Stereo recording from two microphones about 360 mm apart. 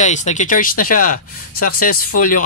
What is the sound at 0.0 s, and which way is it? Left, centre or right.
Speech, centre.